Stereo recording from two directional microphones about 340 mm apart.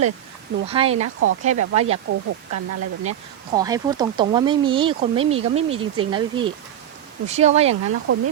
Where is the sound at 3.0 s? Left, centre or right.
Centre.